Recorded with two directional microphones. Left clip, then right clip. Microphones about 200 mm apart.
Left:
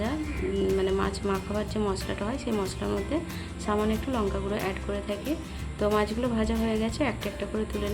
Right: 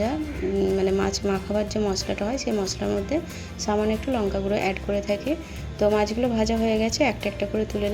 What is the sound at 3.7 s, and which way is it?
A woman's voice, 10° right (ahead or behind).